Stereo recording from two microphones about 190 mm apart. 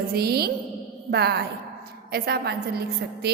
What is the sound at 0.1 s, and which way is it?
A woman's voice, 55° right (ahead or behind).